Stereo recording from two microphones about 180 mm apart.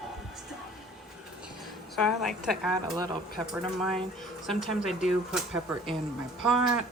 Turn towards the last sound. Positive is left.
turn(degrees=0)  # may be behind; listen again after turning